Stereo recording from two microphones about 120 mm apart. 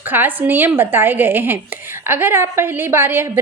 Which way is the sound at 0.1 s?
15° right (ahead or behind).